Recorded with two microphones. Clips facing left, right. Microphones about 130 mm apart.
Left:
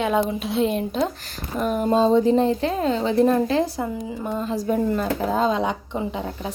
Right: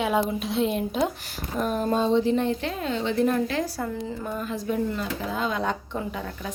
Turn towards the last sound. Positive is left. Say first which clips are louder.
# left 4 dB
turn(degrees=25)  # may be behind; listen again after turning